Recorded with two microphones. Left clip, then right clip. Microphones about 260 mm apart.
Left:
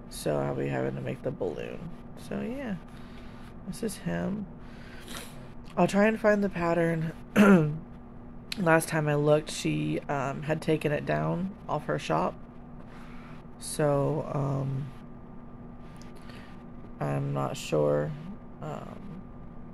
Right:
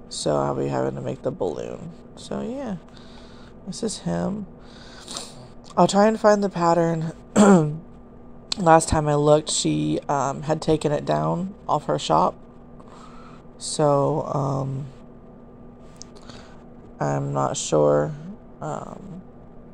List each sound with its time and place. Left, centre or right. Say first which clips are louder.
0.2 s speech: right 7 dB; centre
3.8 s speech: right 6 dB; centre
5.8 s speech: right 7 dB; centre
13.7 s speech: right 7 dB; centre
17.0 s speech: right 8 dB; right